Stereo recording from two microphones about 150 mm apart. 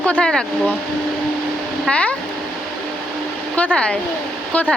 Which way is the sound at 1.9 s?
10° left (ahead or behind).